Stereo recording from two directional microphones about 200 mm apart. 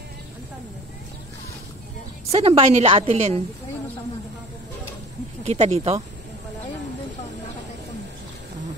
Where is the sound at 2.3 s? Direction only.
30° right (ahead or behind).